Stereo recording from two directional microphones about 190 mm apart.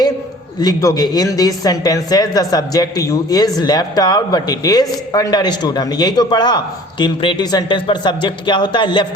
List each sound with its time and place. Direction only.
0.6 s speech: 20° left (ahead or behind)